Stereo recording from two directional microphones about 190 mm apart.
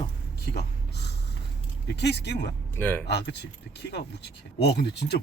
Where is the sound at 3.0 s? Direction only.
60° left (ahead or behind).